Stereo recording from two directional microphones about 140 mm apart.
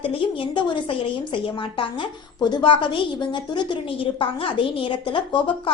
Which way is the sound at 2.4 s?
35° left (ahead or behind).